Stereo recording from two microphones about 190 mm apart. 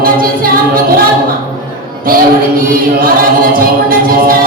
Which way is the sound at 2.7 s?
50° right (ahead or behind).